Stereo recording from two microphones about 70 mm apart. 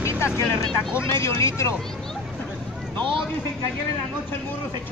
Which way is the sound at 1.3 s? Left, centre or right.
Left.